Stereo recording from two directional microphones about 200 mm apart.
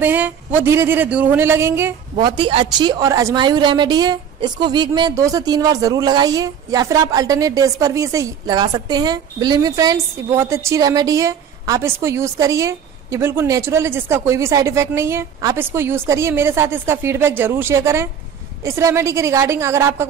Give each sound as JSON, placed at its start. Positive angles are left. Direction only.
{"t": 0.0, "sound": "a woman's voice", "side_deg": -10}
{"t": 2.2, "sound": "a woman's voice", "side_deg": -25}